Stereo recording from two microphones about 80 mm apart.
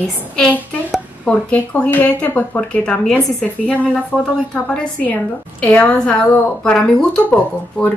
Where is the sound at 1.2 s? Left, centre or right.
Centre.